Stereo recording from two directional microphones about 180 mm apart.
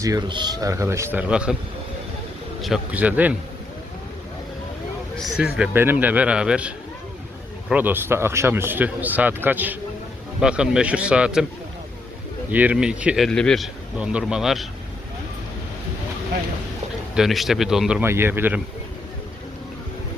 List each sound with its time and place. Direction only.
0.0 s a man's voice: 20° right (ahead or behind); by 1.5 s 5° right (ahead or behind)
2.6 s a man's voice: centre (ahead or behind)
5.2 s a man's voice: 5° right (ahead or behind)
12.5 s speech: 10° right (ahead or behind)
17.2 s speech: centre (ahead or behind)